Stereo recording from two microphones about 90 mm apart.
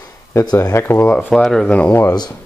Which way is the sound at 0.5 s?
45° left (ahead or behind).